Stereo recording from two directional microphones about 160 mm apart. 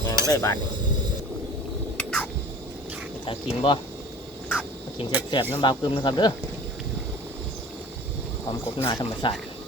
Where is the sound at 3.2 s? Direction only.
30° left (ahead or behind).